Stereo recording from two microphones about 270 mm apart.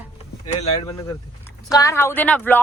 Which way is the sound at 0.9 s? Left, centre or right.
Centre.